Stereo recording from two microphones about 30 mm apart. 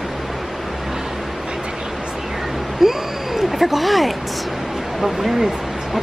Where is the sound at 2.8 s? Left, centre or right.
Centre.